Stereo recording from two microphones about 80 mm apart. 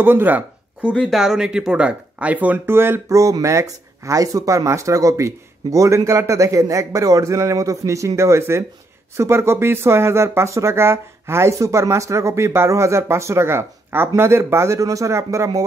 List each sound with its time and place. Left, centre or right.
0.0 s speech: right
1.0 s speech: centre; by 15.6 s right